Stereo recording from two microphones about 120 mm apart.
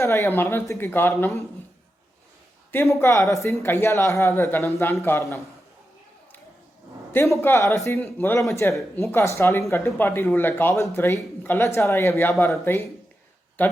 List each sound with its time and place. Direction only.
0.0 s speech: 20° left (ahead or behind)
2.9 s speech: 25° left (ahead or behind)
7.1 s a man's voice: 20° left (ahead or behind)